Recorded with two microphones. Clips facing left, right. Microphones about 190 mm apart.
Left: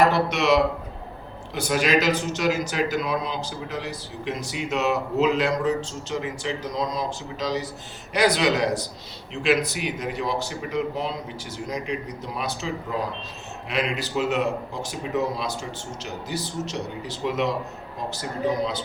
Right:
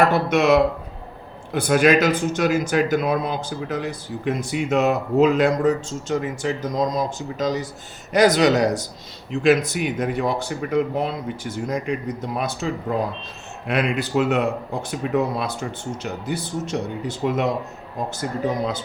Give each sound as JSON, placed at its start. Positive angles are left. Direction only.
{"t": 0.1, "sound": "a man's voice", "side_deg": -50}